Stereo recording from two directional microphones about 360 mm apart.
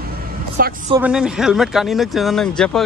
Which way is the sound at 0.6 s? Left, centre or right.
Right.